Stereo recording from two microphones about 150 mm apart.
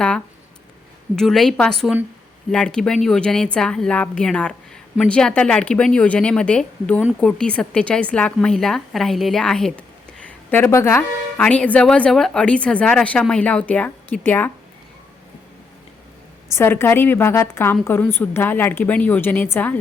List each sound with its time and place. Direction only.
1.1 s a woman's voice: 5° left (ahead or behind)
10.5 s a woman's voice: 15° left (ahead or behind)
16.6 s a woman's voice: 15° left (ahead or behind)